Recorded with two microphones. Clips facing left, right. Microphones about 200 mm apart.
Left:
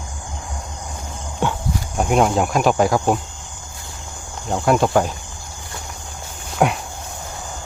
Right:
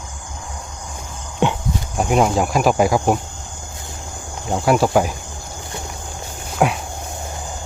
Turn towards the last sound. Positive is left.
turn(degrees=0)  # may be behind; listen again after turning